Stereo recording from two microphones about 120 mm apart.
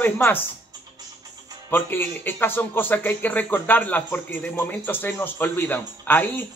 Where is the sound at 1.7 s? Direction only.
15° left (ahead or behind).